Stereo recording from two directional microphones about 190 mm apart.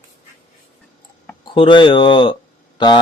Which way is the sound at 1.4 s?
25° left (ahead or behind).